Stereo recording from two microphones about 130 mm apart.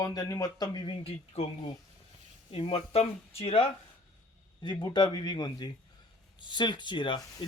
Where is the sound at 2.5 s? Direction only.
45° left (ahead or behind).